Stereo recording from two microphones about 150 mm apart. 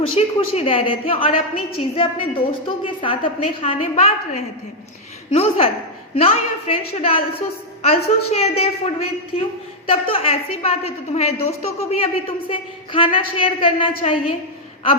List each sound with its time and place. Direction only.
0.1 s a woman's voice: 40° left (ahead or behind)